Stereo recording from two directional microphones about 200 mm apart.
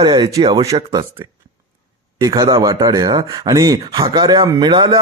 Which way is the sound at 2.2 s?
20° right (ahead or behind).